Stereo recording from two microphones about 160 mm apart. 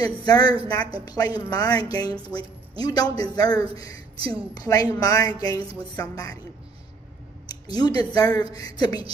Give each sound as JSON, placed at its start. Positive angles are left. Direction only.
{"t": 0.0, "sound": "a woman's voice", "side_deg": 25}
{"t": 7.4, "sound": "a woman's voice", "side_deg": 25}